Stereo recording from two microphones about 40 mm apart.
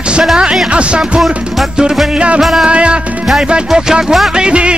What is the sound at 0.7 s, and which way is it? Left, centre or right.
Speech, right.